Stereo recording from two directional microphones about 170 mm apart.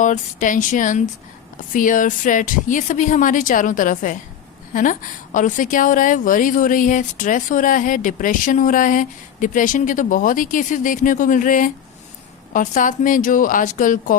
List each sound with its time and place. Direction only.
0.0 s a woman's voice: 50° left (ahead or behind)